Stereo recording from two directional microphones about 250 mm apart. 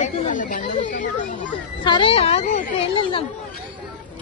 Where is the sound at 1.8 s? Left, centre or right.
Centre.